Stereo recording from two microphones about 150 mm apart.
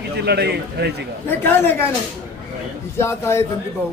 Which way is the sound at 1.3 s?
15° left (ahead or behind).